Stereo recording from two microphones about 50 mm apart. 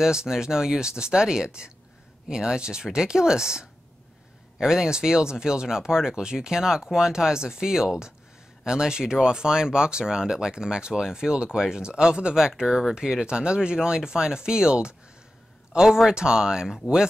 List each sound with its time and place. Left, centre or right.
0.0 s speech: centre